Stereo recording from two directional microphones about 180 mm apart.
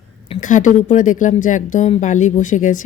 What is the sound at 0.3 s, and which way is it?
Speech, 45° left (ahead or behind).